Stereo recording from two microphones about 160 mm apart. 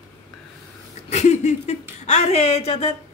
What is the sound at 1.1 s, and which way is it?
Speech, 45° left (ahead or behind).